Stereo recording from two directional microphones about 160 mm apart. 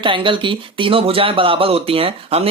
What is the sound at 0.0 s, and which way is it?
Speech, 30° right (ahead or behind).